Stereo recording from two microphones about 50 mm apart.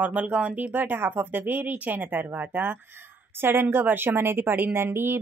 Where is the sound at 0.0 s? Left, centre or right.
Right.